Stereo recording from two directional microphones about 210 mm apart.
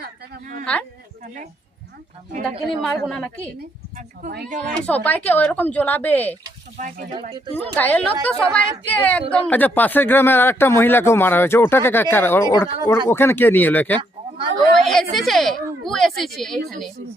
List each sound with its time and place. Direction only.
0.0 s a sound: 40° right (ahead or behind)
0.6 s a woman's voice: 5° left (ahead or behind)
1.2 s speech: 35° right (ahead or behind)
2.5 s a woman's voice: 5° left (ahead or behind)
3.9 s speech: 45° right (ahead or behind)
4.9 s speech: 10° left (ahead or behind)
6.7 s speech: 40° right (ahead or behind)
7.1 s speech: 20° right (ahead or behind)
7.8 s speech: 5° left (ahead or behind)
14.0 s a sound: 25° right (ahead or behind)
14.8 s a woman's voice: centre (ahead or behind)